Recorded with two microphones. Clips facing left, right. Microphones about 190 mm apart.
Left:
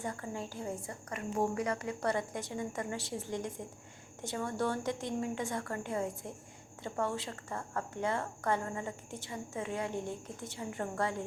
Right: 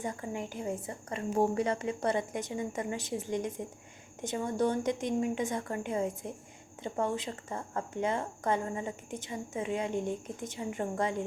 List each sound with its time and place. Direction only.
0.0 s a woman's voice: 20° right (ahead or behind)